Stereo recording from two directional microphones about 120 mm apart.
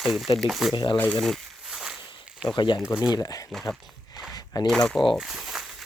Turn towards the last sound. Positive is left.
turn(degrees=-5)  # may be behind; listen again after turning